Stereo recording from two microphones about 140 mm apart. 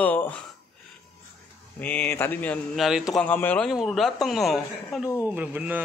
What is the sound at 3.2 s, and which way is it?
Speech, 10° left (ahead or behind).